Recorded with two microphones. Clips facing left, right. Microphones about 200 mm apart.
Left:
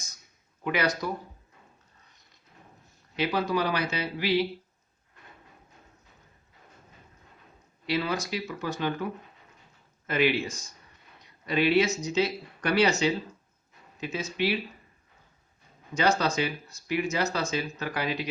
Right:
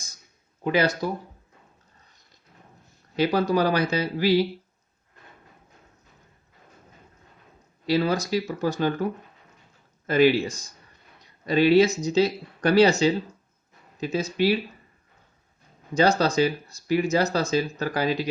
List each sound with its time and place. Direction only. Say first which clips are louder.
0.6 s speech: right 5 dB; 30° right (ahead or behind)
3.2 s speech: right 5 dB; 40° right (ahead or behind)
7.9 s speech: right 6 dB; 35° right (ahead or behind)
10.1 s speech: right 7 dB; 35° right (ahead or behind)
16.0 s speech: right 5 dB; 35° right (ahead or behind)